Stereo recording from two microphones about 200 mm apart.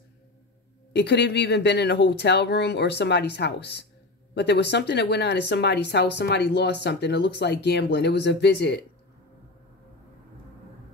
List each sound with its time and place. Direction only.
0.9 s speech: 60° left (ahead or behind)